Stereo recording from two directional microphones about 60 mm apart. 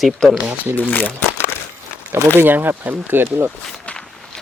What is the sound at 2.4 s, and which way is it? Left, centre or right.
Speech, right.